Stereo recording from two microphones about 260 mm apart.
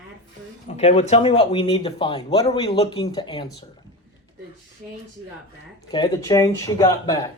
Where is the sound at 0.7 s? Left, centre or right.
Left.